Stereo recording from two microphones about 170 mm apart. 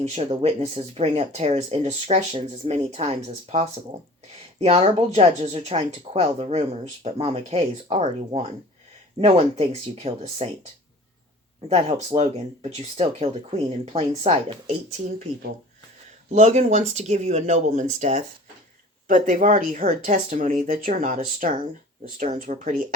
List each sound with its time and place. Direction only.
0.0 s speech: 40° right (ahead or behind)
11.7 s speech: 40° right (ahead or behind)
16.3 s speech: 40° right (ahead or behind)